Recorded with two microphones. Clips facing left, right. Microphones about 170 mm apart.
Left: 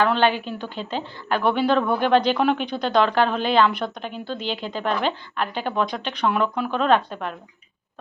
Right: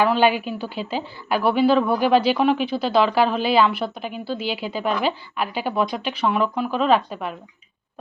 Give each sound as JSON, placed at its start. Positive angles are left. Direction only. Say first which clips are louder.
{"t": 0.0, "sound": "a woman's voice", "louder": "right 2 dB", "side_deg": -10}